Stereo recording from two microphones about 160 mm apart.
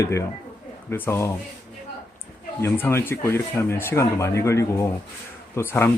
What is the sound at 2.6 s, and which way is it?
Speech, 15° left (ahead or behind).